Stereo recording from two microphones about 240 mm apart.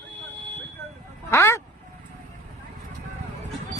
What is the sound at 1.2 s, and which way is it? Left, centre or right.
Speech, centre.